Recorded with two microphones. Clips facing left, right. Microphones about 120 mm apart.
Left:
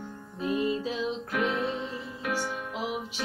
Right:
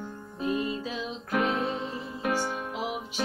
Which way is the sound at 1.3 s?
30° right (ahead or behind).